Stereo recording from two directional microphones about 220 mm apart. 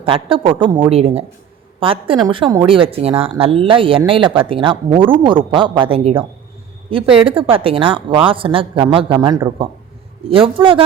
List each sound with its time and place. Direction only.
0.0 s a woman's voice: 25° right (ahead or behind)